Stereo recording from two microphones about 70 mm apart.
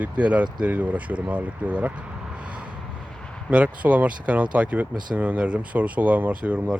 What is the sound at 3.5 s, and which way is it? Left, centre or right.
Speech, centre.